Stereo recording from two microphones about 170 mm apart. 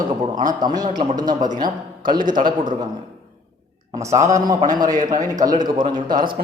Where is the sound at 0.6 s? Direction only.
25° right (ahead or behind).